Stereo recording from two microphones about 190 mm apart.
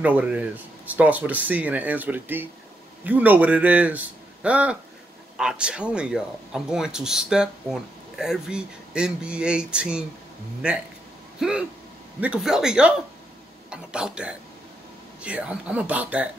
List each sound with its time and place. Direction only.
0.0 s speech: 5° right (ahead or behind)
11.3 s a sound: 5° right (ahead or behind)
12.2 s speech: 5° right (ahead or behind)